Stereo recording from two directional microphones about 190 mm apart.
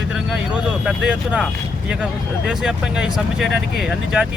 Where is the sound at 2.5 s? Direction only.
5° right (ahead or behind).